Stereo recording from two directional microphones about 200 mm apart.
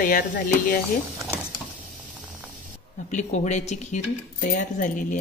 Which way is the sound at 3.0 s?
35° left (ahead or behind).